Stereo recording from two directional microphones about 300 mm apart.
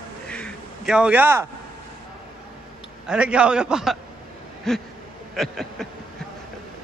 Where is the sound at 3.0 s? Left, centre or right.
Centre.